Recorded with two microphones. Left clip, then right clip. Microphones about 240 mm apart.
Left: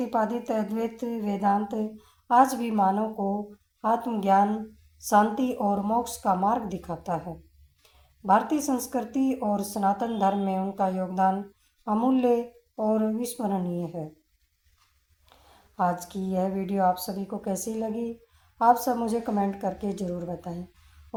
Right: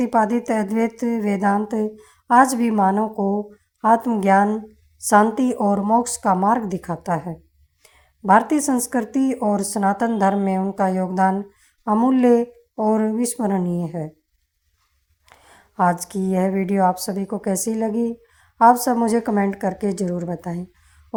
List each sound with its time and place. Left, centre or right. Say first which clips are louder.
0.0 s speech: right 8 dB; right
8.3 s speech: right 7 dB; right
15.3 s speech: right 7 dB; right